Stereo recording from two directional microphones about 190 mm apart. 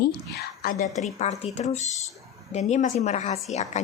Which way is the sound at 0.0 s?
60° left (ahead or behind).